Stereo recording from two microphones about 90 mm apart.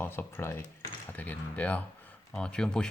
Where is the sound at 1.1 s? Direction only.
20° left (ahead or behind).